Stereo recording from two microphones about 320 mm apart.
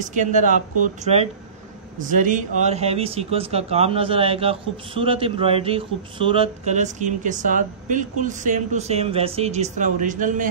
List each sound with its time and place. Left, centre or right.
0.0 s speech: right